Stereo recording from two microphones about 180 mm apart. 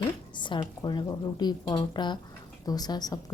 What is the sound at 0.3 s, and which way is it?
A woman's voice, 25° left (ahead or behind).